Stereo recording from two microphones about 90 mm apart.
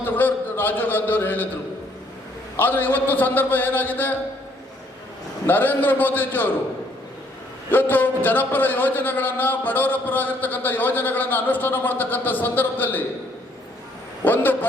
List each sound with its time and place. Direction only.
0.0 s speech: 20° left (ahead or behind)
2.6 s a man's voice: 20° left (ahead or behind)
5.5 s a man's voice: 20° left (ahead or behind)
7.7 s a man's voice: 20° left (ahead or behind)
14.2 s a man's voice: 20° left (ahead or behind)